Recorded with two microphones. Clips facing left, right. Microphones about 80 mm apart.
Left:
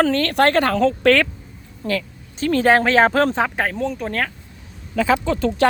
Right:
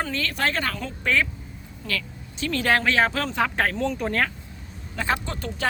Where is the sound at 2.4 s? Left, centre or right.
Left.